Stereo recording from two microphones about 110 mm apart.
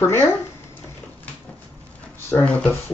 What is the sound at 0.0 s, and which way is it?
Speech, 20° left (ahead or behind).